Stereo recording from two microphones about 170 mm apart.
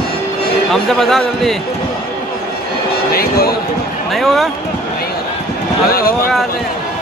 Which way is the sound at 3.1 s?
65° left (ahead or behind).